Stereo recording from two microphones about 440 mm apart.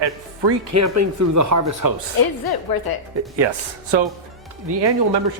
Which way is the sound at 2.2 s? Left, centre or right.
Left.